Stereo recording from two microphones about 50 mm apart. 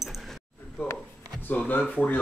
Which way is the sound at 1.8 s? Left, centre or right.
Left.